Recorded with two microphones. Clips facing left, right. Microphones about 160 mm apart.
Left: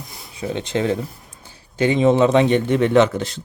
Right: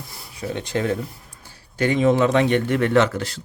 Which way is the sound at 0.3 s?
25° left (ahead or behind).